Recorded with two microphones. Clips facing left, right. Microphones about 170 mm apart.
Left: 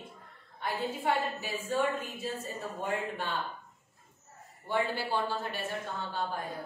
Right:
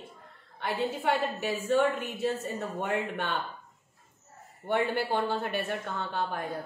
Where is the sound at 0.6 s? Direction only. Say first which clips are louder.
Right 3 dB; 75° right (ahead or behind).